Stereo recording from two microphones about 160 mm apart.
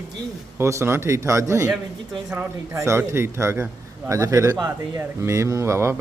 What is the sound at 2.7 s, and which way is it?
Speech, 15° right (ahead or behind).